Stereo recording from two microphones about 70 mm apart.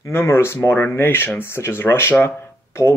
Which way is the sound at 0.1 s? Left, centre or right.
Left.